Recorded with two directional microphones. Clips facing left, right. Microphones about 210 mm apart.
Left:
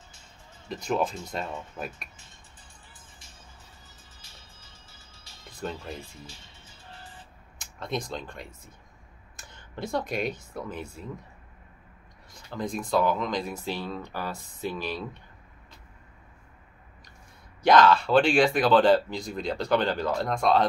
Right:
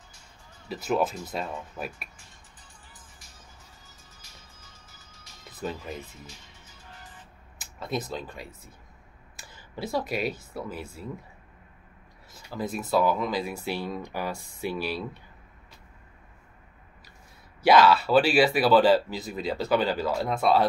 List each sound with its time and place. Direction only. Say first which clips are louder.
0.7 s speech: right 1 dB; 5° right (ahead or behind)
4.2 s music: even; 30° left (ahead or behind)
5.4 s music: right 1 dB; 5° right (ahead or behind)
6.2 s music: even; 30° left (ahead or behind)
7.5 s speech: right 1 dB; 5° right (ahead or behind)
12.4 s speech: even; 5° right (ahead or behind)
17.6 s speech: even; 10° right (ahead or behind)